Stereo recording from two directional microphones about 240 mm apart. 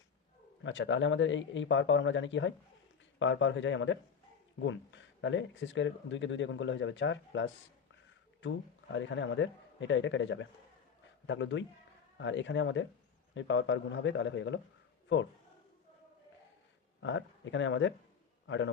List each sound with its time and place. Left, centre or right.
0.6 s speech: left
17.0 s a man's voice: left